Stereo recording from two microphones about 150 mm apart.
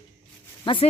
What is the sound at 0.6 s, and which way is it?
Speech, 35° left (ahead or behind).